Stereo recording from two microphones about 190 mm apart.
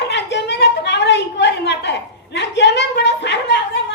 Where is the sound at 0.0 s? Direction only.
65° left (ahead or behind).